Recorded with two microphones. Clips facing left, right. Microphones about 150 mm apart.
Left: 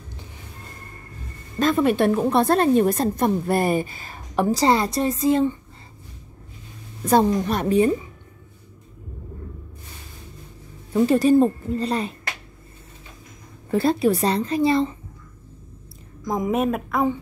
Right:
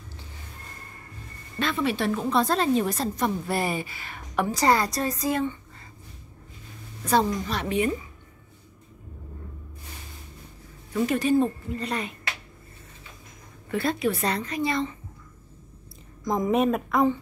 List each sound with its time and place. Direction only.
1.6 s a woman's voice: 45° left (ahead or behind); by 5.5 s 25° left (ahead or behind)
7.1 s a woman's voice: 50° left (ahead or behind)
7.6 s a woman's voice: 35° left (ahead or behind)
10.9 s a woman's voice: 35° left (ahead or behind)
13.7 s a woman's voice: 35° left (ahead or behind)
16.3 s a woman's voice: 5° left (ahead or behind)